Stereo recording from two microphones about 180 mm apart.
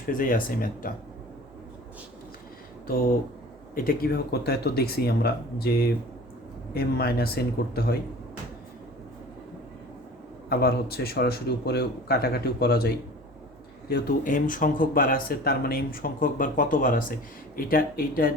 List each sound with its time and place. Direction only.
0.1 s speech: 50° left (ahead or behind)
2.8 s speech: 55° left (ahead or behind)
6.7 s speech: 60° left (ahead or behind)
10.5 s speech: 60° left (ahead or behind)